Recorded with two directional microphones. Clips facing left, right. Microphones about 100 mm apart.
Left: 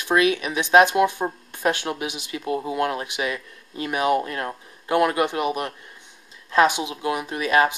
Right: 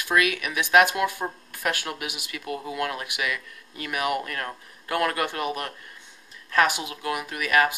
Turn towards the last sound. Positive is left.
turn(degrees=25)  # may be behind; listen again after turning